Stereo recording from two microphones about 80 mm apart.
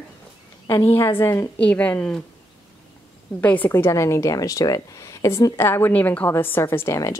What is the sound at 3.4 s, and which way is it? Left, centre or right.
Speech, centre.